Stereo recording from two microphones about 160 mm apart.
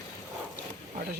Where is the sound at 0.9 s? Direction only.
65° right (ahead or behind).